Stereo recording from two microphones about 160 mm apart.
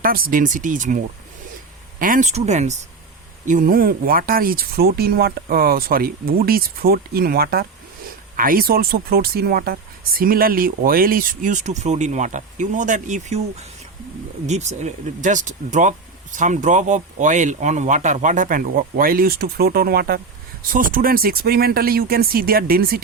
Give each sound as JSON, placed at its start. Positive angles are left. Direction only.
{"t": 0.0, "sound": "speech", "side_deg": -60}
{"t": 2.3, "sound": "speech", "side_deg": -45}
{"t": 3.4, "sound": "speech", "side_deg": -55}